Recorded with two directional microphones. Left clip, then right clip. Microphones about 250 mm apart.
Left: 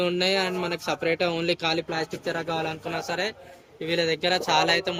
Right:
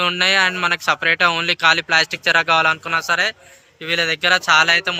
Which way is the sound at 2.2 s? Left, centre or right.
Right.